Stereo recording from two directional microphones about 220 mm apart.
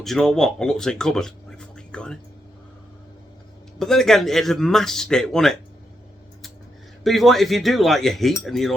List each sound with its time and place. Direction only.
0.0 s speech: centre (ahead or behind)
3.8 s speech: centre (ahead or behind)
7.0 s speech: centre (ahead or behind)